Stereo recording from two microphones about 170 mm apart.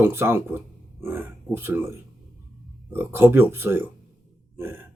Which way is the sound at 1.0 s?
10° right (ahead or behind).